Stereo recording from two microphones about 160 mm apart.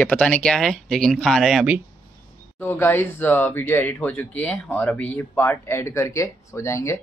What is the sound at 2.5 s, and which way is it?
Speech, 15° left (ahead or behind).